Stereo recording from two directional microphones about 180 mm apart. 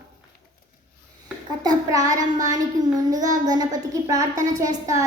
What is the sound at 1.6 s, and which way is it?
Child singing, 20° right (ahead or behind).